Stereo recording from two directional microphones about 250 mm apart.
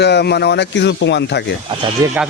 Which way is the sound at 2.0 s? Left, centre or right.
Centre.